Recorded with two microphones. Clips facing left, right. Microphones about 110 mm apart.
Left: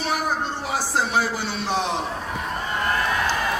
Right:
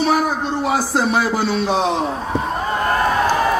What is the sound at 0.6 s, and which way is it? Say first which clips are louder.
A man's voice: right 7 dB; 80° right.